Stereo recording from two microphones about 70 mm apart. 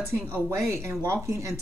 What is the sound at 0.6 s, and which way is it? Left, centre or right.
Speech, right.